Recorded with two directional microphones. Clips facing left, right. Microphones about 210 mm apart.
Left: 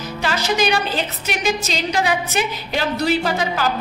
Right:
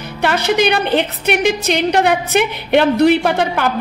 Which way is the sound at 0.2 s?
60° right (ahead or behind).